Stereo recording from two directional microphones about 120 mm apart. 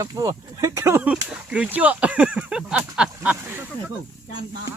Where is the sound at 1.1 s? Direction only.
10° right (ahead or behind).